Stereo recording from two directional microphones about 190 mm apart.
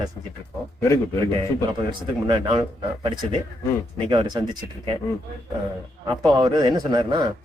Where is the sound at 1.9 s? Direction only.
25° right (ahead or behind).